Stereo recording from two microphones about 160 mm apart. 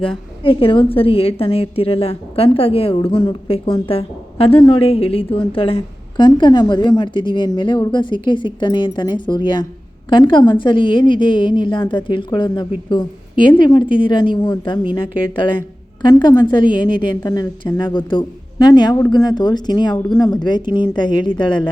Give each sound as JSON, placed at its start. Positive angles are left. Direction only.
{"t": 0.0, "sound": "a woman's voice", "side_deg": 35}